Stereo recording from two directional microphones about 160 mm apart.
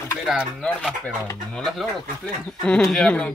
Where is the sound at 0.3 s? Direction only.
Centre (ahead or behind).